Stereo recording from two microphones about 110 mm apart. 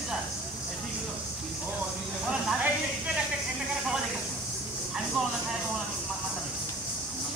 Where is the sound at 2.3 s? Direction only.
10° right (ahead or behind).